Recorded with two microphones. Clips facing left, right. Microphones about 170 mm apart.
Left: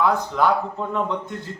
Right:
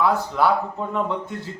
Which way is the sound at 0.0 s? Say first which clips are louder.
Even; 5° right (ahead or behind).